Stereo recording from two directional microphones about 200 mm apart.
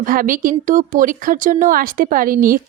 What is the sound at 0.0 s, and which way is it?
Speech, 45° right (ahead or behind).